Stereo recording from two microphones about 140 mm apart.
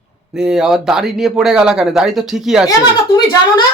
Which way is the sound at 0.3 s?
5° right (ahead or behind).